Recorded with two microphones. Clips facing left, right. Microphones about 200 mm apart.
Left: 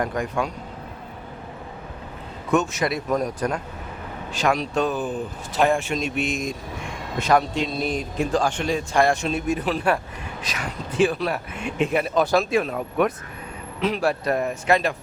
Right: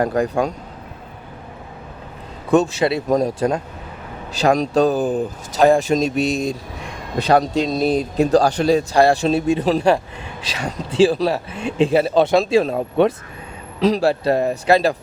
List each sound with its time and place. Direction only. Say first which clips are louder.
0.0 s speech: right 7 dB; 35° right (ahead or behind)
2.5 s speech: right 6 dB; 30° right (ahead or behind)
4.4 s speech: right 7 dB; 40° right (ahead or behind)